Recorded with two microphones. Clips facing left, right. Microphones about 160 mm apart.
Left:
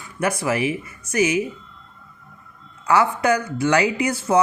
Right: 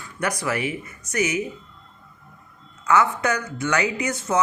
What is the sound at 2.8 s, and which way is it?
Speech, 30° left (ahead or behind).